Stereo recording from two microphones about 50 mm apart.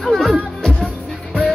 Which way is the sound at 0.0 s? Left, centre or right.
Centre.